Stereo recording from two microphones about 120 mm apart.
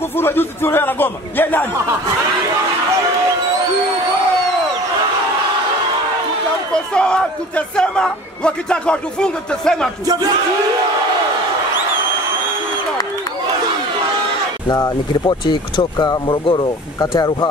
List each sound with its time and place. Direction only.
0.2 s speech: 20° left (ahead or behind)
6.7 s speech: 5° left (ahead or behind)
10.0 s a sound: 30° right (ahead or behind)
14.7 s speech: 35° left (ahead or behind)